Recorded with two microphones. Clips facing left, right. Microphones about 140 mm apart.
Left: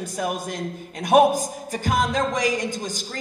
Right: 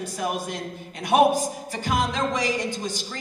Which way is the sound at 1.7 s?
45° left (ahead or behind).